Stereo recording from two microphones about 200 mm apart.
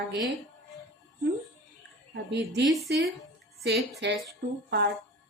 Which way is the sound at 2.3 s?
60° right (ahead or behind).